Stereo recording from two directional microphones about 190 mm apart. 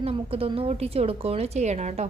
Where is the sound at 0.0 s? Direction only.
30° right (ahead or behind).